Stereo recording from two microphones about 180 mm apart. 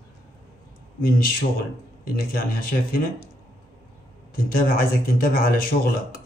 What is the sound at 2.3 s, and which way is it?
Speech, 55° left (ahead or behind).